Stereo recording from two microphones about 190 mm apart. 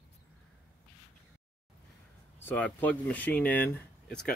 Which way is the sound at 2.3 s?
10° left (ahead or behind).